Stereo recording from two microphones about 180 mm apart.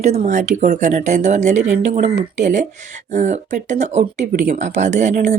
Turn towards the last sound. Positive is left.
turn(degrees=-45)  # may be behind; listen again after turning